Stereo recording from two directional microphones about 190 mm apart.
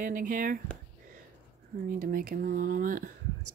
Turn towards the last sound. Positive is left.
turn(degrees=-45)  # may be behind; listen again after turning